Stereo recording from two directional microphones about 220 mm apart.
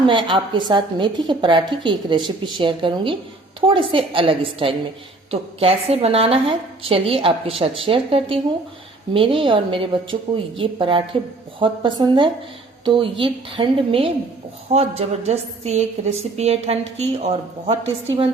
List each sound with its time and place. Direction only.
0.0 s a woman's voice: 20° right (ahead or behind)